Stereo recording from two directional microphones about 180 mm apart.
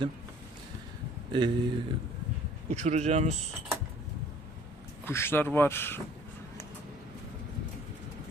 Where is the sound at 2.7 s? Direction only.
40° right (ahead or behind).